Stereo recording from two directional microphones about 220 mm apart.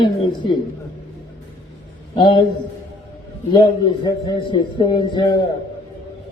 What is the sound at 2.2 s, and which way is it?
Speech, 20° left (ahead or behind).